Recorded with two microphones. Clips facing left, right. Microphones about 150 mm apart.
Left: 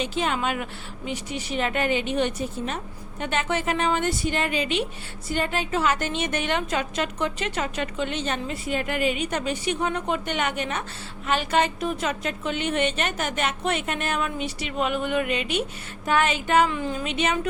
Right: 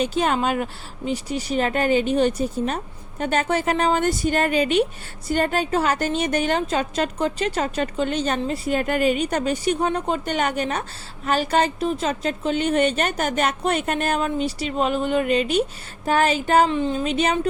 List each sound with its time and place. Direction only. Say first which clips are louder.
0.0 s a woman's voice: right 5 dB; 45° right (ahead or behind)
16.7 s a woman's voice: right 6 dB; 25° right (ahead or behind)